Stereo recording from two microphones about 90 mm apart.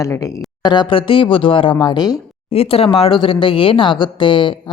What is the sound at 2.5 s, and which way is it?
Speech, 90° left.